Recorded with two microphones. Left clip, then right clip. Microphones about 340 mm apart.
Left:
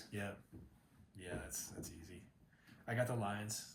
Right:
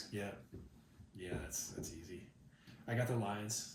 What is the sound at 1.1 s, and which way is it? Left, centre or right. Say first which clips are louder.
Speech: right 2 dB; centre.